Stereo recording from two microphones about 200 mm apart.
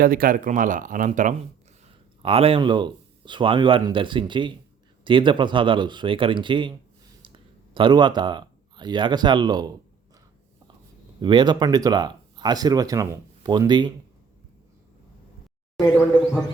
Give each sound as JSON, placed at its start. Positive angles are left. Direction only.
{"t": 0.0, "sound": "speech", "side_deg": -45}
{"t": 2.2, "sound": "speech", "side_deg": -30}
{"t": 11.2, "sound": "speech", "side_deg": -20}